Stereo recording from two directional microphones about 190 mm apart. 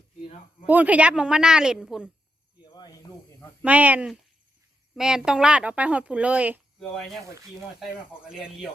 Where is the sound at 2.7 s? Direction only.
20° left (ahead or behind).